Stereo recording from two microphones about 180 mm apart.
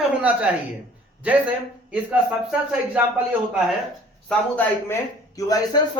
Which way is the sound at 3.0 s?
5° right (ahead or behind).